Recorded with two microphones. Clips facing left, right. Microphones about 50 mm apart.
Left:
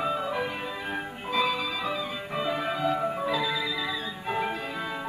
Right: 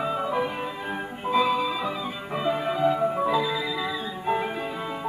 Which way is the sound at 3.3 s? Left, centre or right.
Centre.